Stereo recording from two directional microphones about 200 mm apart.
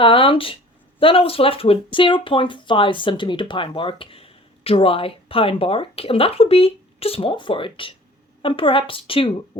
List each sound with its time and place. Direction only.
0.0 s speech: 25° left (ahead or behind)